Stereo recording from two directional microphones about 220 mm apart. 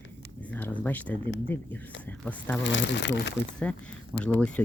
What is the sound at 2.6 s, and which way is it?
Speech, 55° left (ahead or behind).